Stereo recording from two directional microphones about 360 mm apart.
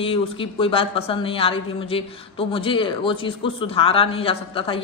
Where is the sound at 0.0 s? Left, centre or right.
Centre.